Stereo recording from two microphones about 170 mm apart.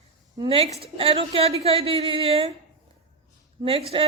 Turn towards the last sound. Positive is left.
turn(degrees=-35)  # may be behind; listen again after turning